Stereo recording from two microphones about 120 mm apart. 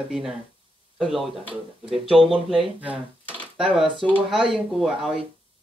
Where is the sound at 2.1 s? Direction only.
50° right (ahead or behind).